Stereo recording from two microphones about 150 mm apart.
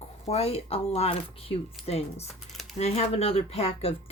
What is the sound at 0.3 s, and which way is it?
A woman's voice, 45° left (ahead or behind).